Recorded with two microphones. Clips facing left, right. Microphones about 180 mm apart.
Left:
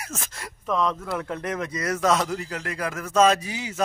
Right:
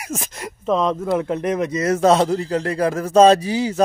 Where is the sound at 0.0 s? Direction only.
15° right (ahead or behind).